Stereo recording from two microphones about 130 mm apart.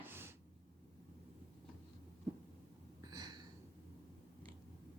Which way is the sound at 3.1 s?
30° right (ahead or behind).